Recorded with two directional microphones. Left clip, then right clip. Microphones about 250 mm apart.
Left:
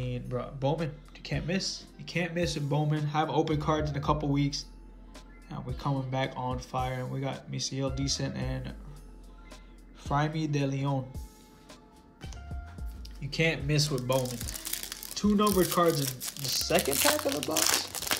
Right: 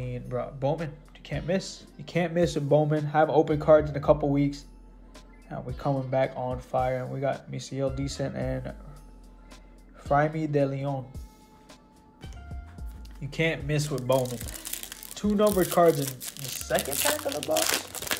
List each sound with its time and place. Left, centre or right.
0.0 s speech: centre
1.5 s speech: centre
10.0 s speech: centre
12.7 s speech: centre